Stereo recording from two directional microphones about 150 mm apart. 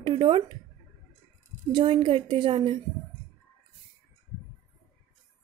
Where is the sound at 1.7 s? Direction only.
30° right (ahead or behind).